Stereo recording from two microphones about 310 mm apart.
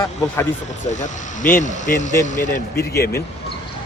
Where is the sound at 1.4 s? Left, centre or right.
Left.